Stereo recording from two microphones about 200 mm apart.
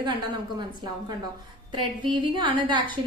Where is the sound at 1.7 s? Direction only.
25° right (ahead or behind).